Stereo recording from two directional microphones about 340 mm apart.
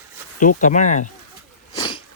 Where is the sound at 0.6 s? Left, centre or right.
Left.